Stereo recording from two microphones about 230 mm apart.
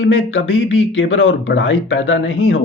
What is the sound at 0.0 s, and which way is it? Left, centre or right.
Speech, left.